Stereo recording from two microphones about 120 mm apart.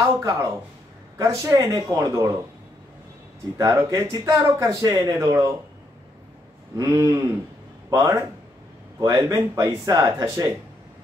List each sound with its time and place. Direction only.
0.0 s speech: 20° right (ahead or behind)
3.5 s speech: 30° right (ahead or behind)
6.8 s speech: 25° right (ahead or behind)